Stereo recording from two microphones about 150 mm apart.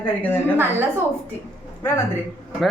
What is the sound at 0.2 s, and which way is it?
Speech, 15° left (ahead or behind).